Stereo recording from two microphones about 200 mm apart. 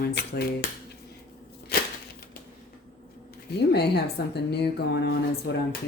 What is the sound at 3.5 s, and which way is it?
A woman's voice, 55° left (ahead or behind).